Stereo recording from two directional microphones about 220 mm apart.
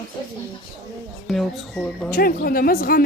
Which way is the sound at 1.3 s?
Centre (ahead or behind).